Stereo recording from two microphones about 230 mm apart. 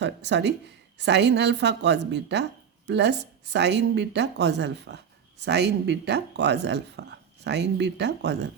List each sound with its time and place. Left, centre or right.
0.0 s speech: right